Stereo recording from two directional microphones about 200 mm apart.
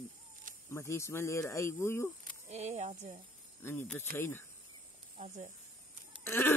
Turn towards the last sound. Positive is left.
turn(degrees=10)  # may be behind; listen again after turning